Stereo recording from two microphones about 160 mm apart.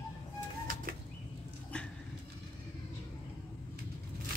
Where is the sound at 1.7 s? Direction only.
5° left (ahead or behind).